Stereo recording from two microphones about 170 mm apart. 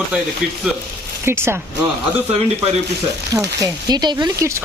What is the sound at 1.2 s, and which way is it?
Speech, 15° right (ahead or behind).